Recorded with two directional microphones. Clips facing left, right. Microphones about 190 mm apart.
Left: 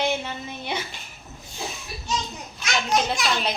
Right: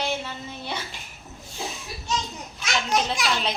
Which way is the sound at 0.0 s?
20° left (ahead or behind).